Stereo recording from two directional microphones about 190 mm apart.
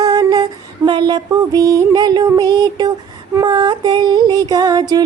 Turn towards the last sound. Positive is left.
turn(degrees=-20)  # may be behind; listen again after turning